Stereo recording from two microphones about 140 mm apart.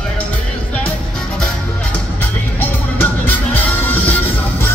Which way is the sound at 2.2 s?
15° left (ahead or behind).